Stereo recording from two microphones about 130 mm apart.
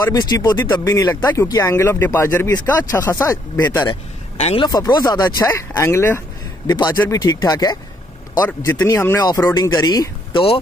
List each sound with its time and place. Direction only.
0.0 s speech: 30° left (ahead or behind)
4.6 s speech: 30° left (ahead or behind)
5.4 s speech: 20° left (ahead or behind)
9.2 s speech: 30° left (ahead or behind)